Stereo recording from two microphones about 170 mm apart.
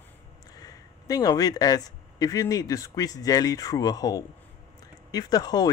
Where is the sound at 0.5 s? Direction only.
20° left (ahead or behind).